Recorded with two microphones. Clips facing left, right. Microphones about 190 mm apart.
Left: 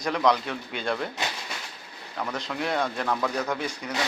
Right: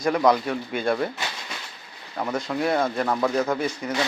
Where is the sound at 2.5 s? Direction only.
10° right (ahead or behind).